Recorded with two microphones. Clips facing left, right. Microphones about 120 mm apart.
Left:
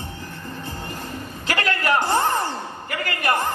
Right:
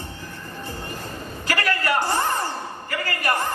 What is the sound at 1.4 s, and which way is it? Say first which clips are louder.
A man's voice: left 1 dB; 20° left (ahead or behind).